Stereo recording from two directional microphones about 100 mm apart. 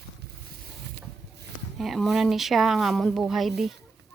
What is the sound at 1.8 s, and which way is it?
Speech, centre (ahead or behind).